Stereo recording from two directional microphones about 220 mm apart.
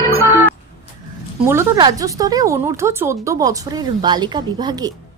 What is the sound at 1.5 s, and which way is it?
Speech, 15° right (ahead or behind).